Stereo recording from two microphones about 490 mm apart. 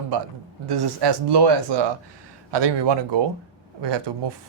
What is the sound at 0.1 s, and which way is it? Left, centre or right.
Speech, right.